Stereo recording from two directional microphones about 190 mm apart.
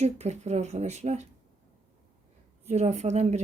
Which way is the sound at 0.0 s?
35° right (ahead or behind).